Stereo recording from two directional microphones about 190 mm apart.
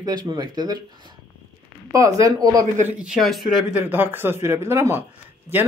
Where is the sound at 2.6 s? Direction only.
40° right (ahead or behind).